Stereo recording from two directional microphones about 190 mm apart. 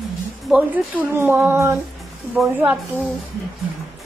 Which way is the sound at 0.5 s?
5° right (ahead or behind).